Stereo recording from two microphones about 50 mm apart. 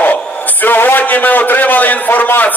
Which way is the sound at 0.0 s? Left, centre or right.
Left.